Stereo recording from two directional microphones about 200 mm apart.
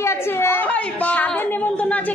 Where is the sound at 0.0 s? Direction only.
10° left (ahead or behind).